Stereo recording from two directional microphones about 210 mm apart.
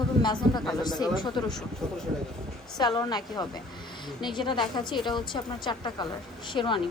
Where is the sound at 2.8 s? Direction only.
20° left (ahead or behind).